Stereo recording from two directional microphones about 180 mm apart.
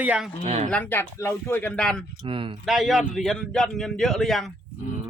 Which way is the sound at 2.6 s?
Centre (ahead or behind).